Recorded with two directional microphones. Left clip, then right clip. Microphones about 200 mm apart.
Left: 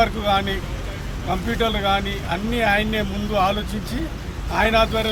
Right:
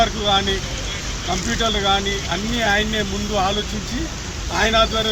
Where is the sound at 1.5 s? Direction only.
20° left (ahead or behind).